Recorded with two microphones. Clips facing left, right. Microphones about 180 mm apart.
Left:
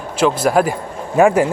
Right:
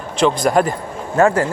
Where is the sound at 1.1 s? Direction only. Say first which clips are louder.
Left 2 dB; 15° left (ahead or behind).